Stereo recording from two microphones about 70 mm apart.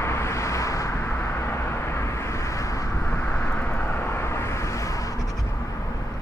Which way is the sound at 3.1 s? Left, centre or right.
Left.